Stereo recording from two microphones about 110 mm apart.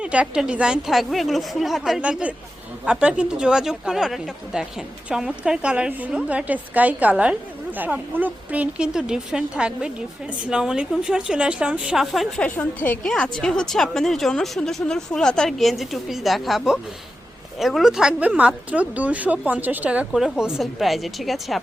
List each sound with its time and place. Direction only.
0.0 s a woman's voice: 10° right (ahead or behind)
12.4 s a woman's voice: 15° left (ahead or behind); by 21.6 s centre (ahead or behind)